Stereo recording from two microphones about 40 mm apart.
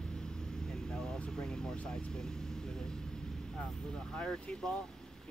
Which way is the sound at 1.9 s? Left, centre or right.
Left.